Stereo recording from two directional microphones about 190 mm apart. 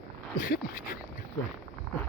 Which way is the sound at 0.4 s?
50° left (ahead or behind).